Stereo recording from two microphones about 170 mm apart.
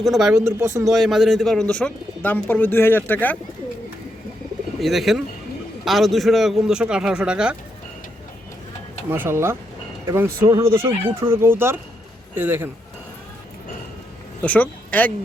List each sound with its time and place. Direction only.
0.0 s a man's voice: centre (ahead or behind)
0.3 s speech: 15° right (ahead or behind)
0.9 s speech: centre (ahead or behind)
4.8 s a man's voice: centre (ahead or behind)
9.0 s speech: 10° right (ahead or behind)
14.4 s speech: 10° left (ahead or behind)